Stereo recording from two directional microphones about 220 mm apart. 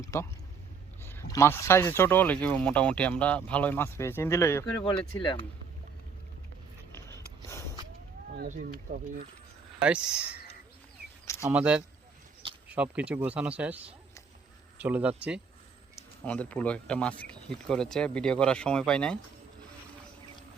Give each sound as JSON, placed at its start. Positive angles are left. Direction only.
{"t": 0.1, "sound": "speech", "side_deg": 15}
{"t": 8.9, "sound": "speech", "side_deg": -45}
{"t": 9.8, "sound": "speech", "side_deg": -5}
{"t": 11.4, "sound": "speech", "side_deg": -5}
{"t": 16.0, "sound": "speech", "side_deg": 5}